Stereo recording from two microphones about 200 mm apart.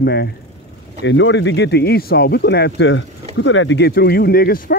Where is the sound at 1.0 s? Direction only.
65° left (ahead or behind).